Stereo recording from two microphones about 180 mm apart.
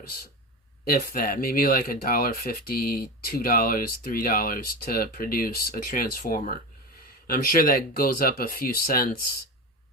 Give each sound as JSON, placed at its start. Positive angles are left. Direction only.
{"t": 0.9, "sound": "speech", "side_deg": 55}